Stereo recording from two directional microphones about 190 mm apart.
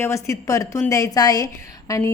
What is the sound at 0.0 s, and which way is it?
A woman's voice, 15° left (ahead or behind).